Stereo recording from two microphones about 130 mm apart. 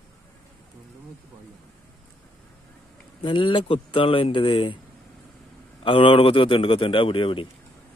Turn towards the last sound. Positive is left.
turn(degrees=40)  # may be behind; listen again after turning